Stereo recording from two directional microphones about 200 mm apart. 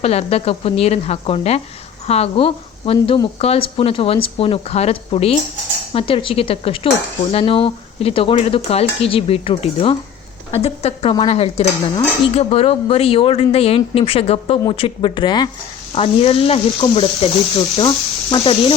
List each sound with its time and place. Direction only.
0.0 s speech: 30° left (ahead or behind)
2.0 s cutlery: 30° left (ahead or behind)
10.6 s speech: 30° left (ahead or behind)
11.1 s cutlery: 25° left (ahead or behind)